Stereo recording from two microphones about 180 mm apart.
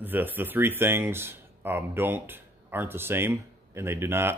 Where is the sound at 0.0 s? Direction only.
10° right (ahead or behind).